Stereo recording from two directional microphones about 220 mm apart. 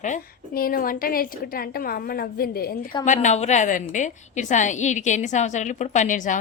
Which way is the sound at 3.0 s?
35° left (ahead or behind).